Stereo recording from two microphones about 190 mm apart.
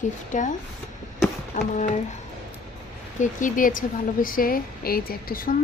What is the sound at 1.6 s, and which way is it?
Speech, 45° left (ahead or behind).